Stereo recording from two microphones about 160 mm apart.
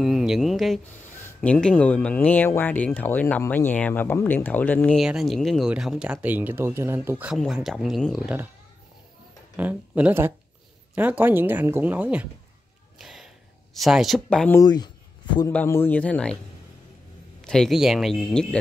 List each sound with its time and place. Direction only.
0.0 s speech: centre (ahead or behind)
7.3 s speech: centre (ahead or behind)
9.6 s speech: 10° right (ahead or behind)
13.0 s a sound: centre (ahead or behind)
13.7 s speech: centre (ahead or behind)
14.6 s speech: 25° left (ahead or behind)
15.5 s speech: 15° left (ahead or behind)
17.4 s speech: 5° left (ahead or behind)